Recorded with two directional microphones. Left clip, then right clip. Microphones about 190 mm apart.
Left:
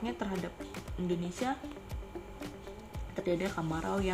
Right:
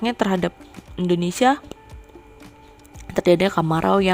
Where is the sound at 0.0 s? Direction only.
55° right (ahead or behind).